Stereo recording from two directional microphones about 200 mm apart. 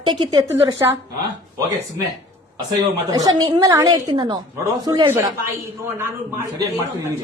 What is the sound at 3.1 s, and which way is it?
Speech, 20° right (ahead or behind).